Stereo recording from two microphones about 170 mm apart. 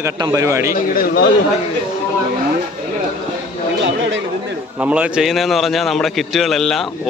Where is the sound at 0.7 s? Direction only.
60° left (ahead or behind).